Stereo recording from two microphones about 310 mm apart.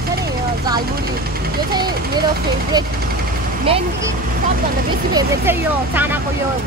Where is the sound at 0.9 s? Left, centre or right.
Right.